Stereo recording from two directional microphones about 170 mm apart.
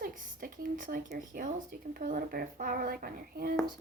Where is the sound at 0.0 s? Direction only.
55° right (ahead or behind).